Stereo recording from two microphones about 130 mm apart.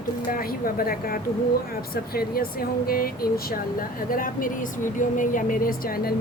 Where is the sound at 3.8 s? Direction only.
90° left.